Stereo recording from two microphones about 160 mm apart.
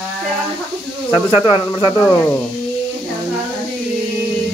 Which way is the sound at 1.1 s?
10° right (ahead or behind).